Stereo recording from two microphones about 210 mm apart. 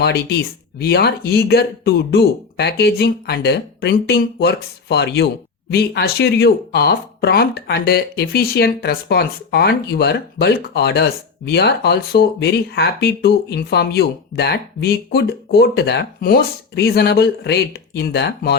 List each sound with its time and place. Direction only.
0.0 s speech: 50° left (ahead or behind)